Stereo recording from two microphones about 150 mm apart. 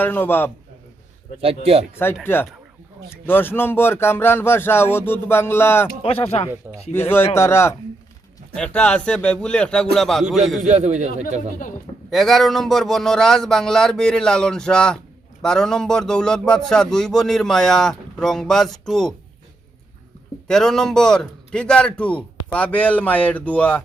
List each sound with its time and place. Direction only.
0.0 s speech: 15° left (ahead or behind)
1.4 s speech: 40° right (ahead or behind)
2.2 s speech: 15° left (ahead or behind)
6.0 s speech: 40° left (ahead or behind)
6.9 s speech: 15° left (ahead or behind)
8.5 s speech: 5° left (ahead or behind)
10.6 s speech: 50° right (ahead or behind)
12.1 s speech: centre (ahead or behind)
20.5 s speech: 5° left (ahead or behind)